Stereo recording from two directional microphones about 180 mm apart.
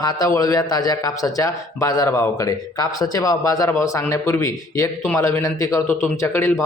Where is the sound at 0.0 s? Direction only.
20° left (ahead or behind).